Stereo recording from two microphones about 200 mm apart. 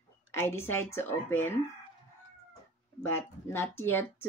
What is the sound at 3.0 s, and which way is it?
Speech, 15° left (ahead or behind).